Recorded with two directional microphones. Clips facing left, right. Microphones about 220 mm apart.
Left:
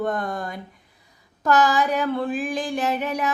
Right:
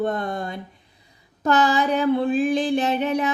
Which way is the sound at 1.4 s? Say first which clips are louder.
Even; 25° right (ahead or behind).